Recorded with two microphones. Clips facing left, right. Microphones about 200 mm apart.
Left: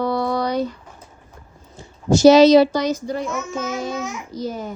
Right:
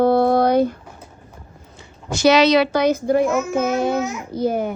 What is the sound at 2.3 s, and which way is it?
A child's voice, 65° right (ahead or behind).